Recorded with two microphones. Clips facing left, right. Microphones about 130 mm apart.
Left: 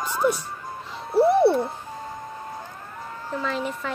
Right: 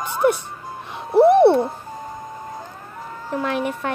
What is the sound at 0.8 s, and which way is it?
Music, 65° right (ahead or behind).